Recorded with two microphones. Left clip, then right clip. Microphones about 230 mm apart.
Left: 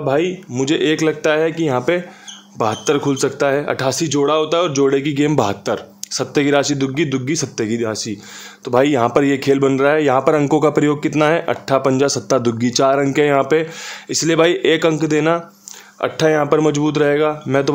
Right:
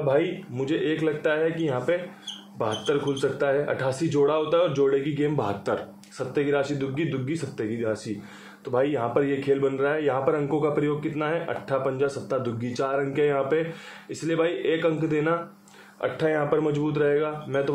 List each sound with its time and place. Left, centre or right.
0.1 s a man's voice: left
6.1 s a man's voice: left